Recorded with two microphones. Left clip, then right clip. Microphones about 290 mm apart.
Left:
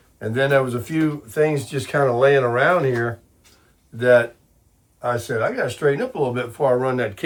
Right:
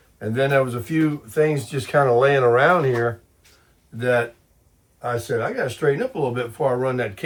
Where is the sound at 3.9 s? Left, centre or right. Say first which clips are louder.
Left 5 dB; centre.